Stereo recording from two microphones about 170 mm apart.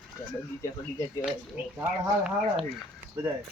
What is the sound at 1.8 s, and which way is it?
Speech, 5° right (ahead or behind).